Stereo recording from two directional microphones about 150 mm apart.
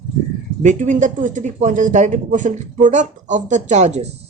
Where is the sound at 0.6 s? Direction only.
55° right (ahead or behind).